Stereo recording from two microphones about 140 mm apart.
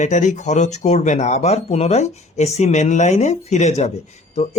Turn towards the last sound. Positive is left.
turn(degrees=50)  # may be behind; listen again after turning